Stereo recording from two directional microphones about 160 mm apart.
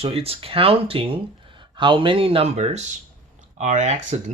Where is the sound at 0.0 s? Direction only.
35° right (ahead or behind).